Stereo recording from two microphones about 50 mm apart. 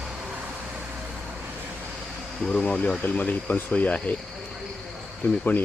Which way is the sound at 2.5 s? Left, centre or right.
Left.